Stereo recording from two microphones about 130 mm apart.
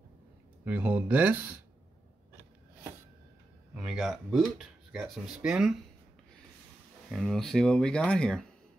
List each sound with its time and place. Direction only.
0.7 s speech: 15° right (ahead or behind)
3.7 s speech: 5° right (ahead or behind)
7.1 s speech: 5° left (ahead or behind)